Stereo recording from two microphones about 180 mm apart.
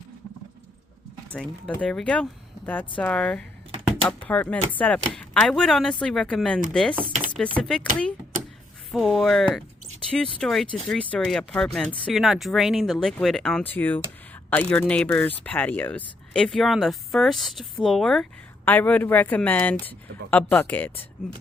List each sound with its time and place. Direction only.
1.3 s speech: 5° left (ahead or behind)
8.9 s speech: centre (ahead or behind)